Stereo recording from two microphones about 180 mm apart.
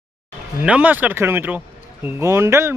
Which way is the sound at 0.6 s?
5° right (ahead or behind).